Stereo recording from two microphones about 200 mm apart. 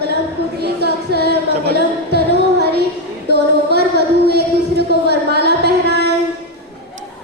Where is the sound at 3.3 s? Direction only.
55° right (ahead or behind).